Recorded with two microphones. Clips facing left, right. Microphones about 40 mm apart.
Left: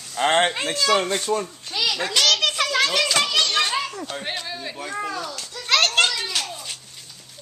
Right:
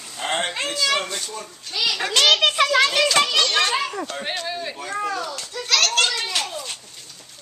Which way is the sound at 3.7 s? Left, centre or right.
Right.